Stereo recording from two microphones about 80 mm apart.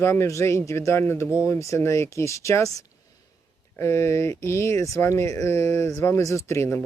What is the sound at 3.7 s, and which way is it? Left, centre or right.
Speech, left.